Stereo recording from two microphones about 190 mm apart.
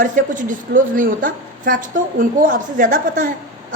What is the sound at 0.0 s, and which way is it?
A woman's voice, 45° right (ahead or behind).